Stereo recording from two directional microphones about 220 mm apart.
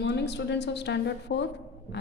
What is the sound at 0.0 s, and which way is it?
A woman's voice, 50° left (ahead or behind).